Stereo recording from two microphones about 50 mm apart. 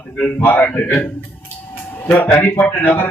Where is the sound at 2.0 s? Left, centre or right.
Left.